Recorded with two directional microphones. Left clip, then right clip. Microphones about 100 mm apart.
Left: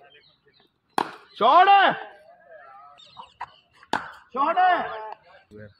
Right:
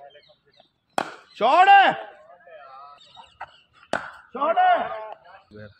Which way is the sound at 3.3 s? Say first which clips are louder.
Left 1 dB; centre (ahead or behind).